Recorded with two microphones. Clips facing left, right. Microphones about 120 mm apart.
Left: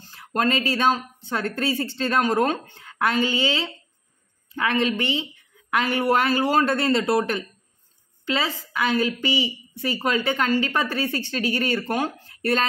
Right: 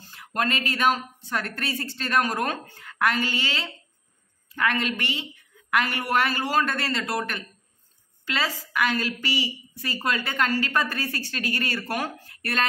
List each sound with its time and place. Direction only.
0.1 s a woman's voice: 30° left (ahead or behind)